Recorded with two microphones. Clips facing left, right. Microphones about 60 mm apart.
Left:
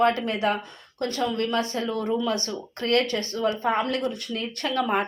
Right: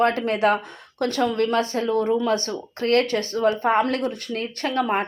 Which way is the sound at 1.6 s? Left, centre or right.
Right.